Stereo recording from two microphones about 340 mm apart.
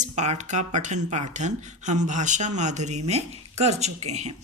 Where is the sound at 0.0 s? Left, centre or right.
Centre.